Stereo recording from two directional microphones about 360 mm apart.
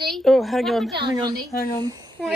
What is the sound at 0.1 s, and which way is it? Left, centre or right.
Speech, centre.